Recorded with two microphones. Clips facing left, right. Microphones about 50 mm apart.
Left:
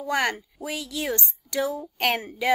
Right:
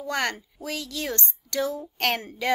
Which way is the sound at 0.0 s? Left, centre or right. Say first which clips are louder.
Left 3 dB; centre.